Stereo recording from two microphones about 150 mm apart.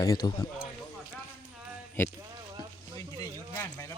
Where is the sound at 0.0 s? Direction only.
25° left (ahead or behind).